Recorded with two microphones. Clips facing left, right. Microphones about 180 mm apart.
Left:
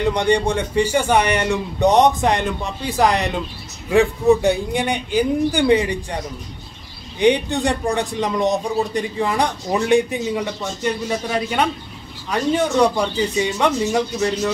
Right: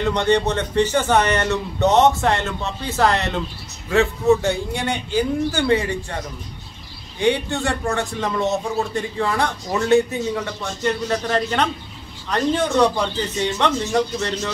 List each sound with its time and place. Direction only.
0.0 s speech: 15° left (ahead or behind)